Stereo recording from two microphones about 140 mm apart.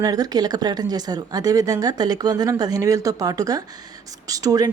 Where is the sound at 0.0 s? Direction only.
25° right (ahead or behind).